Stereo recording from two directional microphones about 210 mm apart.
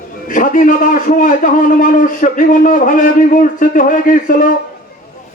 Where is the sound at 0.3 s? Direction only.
40° left (ahead or behind).